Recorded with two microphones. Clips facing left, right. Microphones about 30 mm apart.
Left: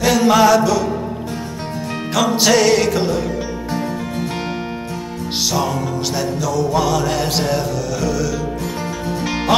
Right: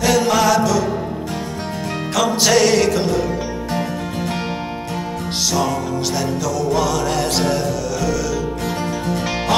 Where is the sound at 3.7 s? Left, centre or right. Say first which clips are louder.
Left 1 dB; right.